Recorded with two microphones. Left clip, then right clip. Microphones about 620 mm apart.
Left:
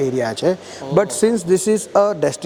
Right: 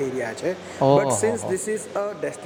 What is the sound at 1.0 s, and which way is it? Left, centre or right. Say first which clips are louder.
Speech: left 5 dB; left.